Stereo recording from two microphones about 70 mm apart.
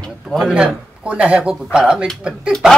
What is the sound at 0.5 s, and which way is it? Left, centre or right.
Speech, centre.